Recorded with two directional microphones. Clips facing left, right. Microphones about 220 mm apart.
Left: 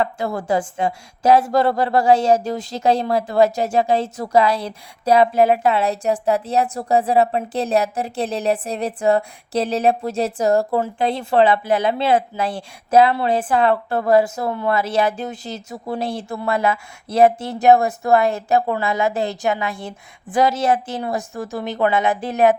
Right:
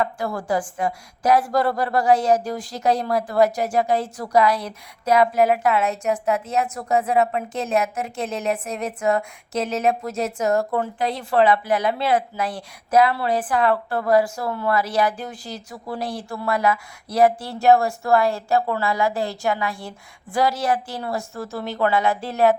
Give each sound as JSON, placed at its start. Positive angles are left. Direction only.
{"t": 0.0, "sound": "a woman's voice", "side_deg": 25}